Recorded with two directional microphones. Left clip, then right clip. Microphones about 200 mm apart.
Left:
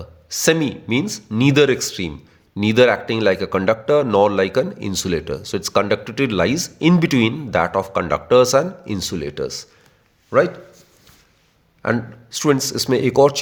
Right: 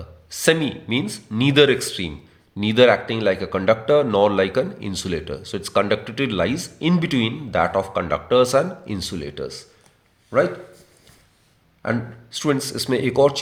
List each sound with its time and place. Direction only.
0.0 s a man's voice: 40° left (ahead or behind)
11.8 s speech: 45° left (ahead or behind)